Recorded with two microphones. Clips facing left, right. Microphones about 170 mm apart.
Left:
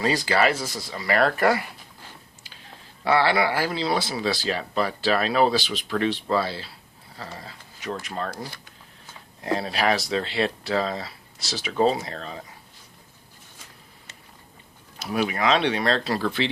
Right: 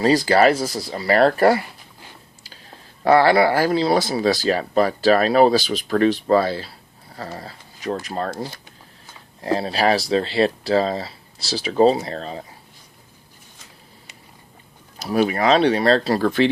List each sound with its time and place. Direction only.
0.0 s speech: 35° right (ahead or behind)
3.0 s speech: 45° right (ahead or behind)
14.9 s speech: 35° right (ahead or behind)